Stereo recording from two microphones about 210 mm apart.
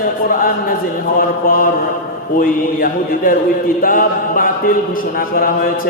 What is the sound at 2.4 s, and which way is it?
A man's voice, 40° left (ahead or behind).